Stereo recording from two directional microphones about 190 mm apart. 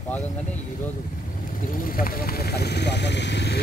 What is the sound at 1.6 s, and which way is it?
Speech, 45° left (ahead or behind).